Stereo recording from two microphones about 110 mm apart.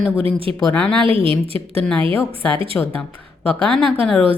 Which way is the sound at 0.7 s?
10° left (ahead or behind).